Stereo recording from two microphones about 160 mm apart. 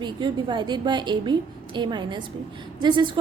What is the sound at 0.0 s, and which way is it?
A woman's voice, 30° right (ahead or behind).